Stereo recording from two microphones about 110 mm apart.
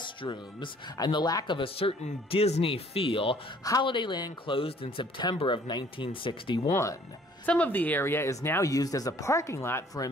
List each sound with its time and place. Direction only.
0.0 s speech: 45° left (ahead or behind)
1.6 s speech: 60° left (ahead or behind); by 4.6 s 45° left (ahead or behind)
4.6 s speech: 55° left (ahead or behind)
5.7 s speech: 45° left (ahead or behind)
6.6 s speech: 30° left (ahead or behind)
7.4 s speech: 15° left (ahead or behind)